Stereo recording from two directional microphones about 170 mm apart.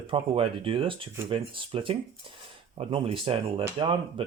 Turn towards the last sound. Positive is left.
turn(degrees=-30)  # may be behind; listen again after turning